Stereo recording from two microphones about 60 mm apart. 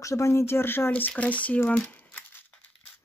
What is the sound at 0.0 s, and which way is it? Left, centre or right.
Speech, left.